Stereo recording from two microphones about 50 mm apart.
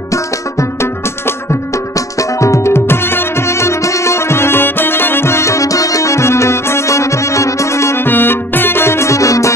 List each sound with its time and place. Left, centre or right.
0.1 s music: left
1.2 s music: left
8.0 s music: left